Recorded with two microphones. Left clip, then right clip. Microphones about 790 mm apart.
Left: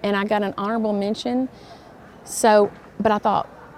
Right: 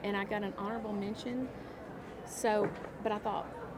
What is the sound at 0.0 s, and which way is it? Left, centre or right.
A woman's voice, left.